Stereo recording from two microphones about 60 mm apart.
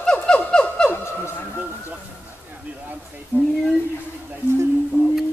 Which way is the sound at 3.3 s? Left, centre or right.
Right.